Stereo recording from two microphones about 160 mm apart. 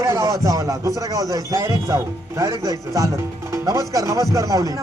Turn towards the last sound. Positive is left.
turn(degrees=-20)  # may be behind; listen again after turning